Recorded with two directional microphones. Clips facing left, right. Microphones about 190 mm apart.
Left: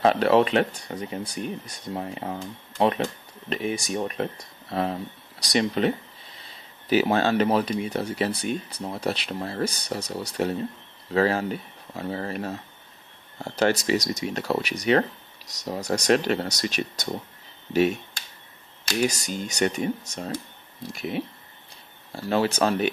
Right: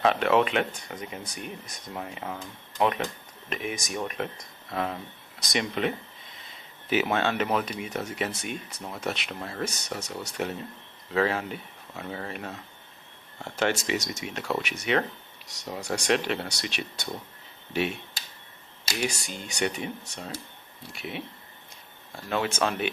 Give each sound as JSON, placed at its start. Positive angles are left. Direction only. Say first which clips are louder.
{"t": 0.0, "sound": "speech", "louder": "left 4 dB", "side_deg": 35}
{"t": 19.0, "sound": "speech", "louder": "left 5 dB", "side_deg": 40}